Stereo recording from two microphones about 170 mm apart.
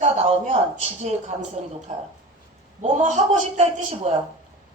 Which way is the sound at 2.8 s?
45° right (ahead or behind).